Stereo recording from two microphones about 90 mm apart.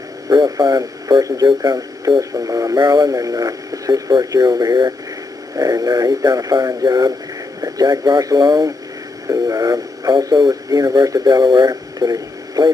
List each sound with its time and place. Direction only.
0.3 s speech: 50° right (ahead or behind)
10.1 s speech: 55° right (ahead or behind)
10.5 s speech: 45° right (ahead or behind)